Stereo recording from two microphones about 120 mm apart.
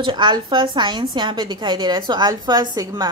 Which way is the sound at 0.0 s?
40° right (ahead or behind).